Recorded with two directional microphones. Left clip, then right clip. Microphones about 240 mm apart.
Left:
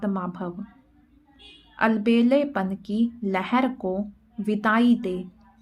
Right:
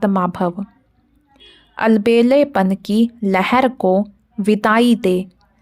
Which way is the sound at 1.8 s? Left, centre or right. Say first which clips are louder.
Right 8 dB; right.